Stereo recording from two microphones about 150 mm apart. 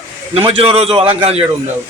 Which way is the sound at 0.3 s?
40° right (ahead or behind).